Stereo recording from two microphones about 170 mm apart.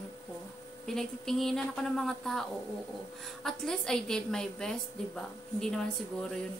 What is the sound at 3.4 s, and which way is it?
A woman's voice, 5° left (ahead or behind).